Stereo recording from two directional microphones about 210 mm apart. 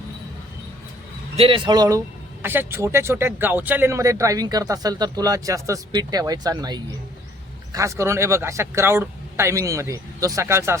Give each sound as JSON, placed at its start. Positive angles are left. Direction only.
{"t": 1.4, "sound": "speech", "side_deg": -25}